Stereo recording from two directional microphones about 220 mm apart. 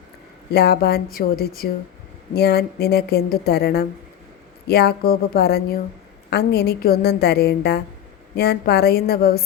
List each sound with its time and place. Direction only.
0.5 s speech: 45° left (ahead or behind)